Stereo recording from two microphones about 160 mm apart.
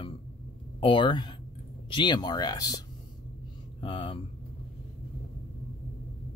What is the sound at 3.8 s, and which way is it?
Mantra, 30° left (ahead or behind).